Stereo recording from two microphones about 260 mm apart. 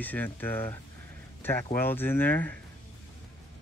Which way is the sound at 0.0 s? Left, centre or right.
Centre.